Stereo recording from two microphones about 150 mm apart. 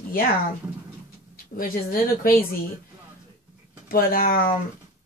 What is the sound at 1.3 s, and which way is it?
Speech, 75° left (ahead or behind).